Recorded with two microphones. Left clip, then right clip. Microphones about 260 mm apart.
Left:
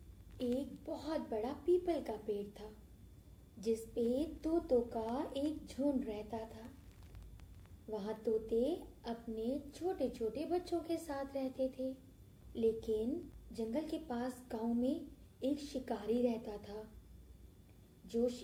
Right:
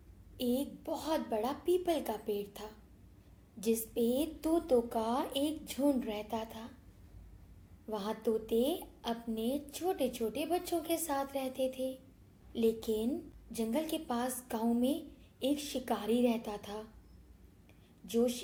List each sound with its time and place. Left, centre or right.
0.3 s a woman's voice: right
7.9 s a woman's voice: right